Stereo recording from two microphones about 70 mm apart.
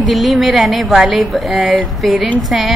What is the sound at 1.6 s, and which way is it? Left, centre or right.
Speech, centre.